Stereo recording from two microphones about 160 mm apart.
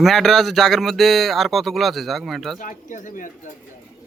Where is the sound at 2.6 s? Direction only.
55° left (ahead or behind).